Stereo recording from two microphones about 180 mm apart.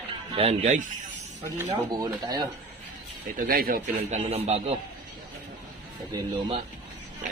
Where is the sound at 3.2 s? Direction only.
55° right (ahead or behind); by 4.7 s 35° right (ahead or behind).